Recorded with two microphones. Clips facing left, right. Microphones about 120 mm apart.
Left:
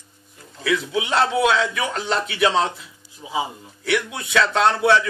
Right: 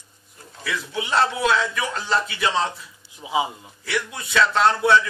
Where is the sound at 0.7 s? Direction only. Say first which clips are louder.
Left 4 dB; 65° left (ahead or behind).